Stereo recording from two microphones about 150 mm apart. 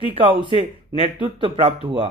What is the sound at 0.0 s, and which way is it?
Speech, 35° right (ahead or behind).